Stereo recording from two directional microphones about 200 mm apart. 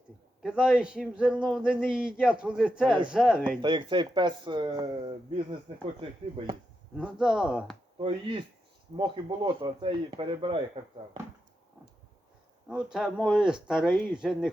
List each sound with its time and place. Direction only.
0.4 s speech: 5° right (ahead or behind)
2.8 s speech: 25° right (ahead or behind)
3.1 s speech: 5° right (ahead or behind)
3.6 s speech: 25° right (ahead or behind)
6.9 s speech: 5° right (ahead or behind)
7.9 s speech: 25° right (ahead or behind)
12.6 s speech: 5° right (ahead or behind)
13.8 s speech: 10° left (ahead or behind)
14.2 s speech: centre (ahead or behind)